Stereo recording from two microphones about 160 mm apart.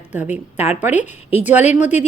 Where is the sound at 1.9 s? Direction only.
45° left (ahead or behind).